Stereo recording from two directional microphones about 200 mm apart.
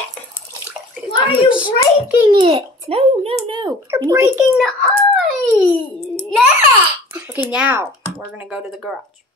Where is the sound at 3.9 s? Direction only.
15° right (ahead or behind).